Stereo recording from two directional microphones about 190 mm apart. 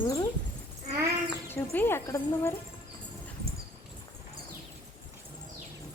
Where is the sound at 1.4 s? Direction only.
10° left (ahead or behind).